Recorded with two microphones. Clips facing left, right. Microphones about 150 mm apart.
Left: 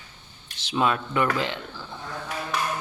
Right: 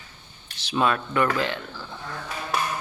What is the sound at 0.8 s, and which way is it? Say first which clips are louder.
Speech: right 1 dB; 15° left (ahead or behind).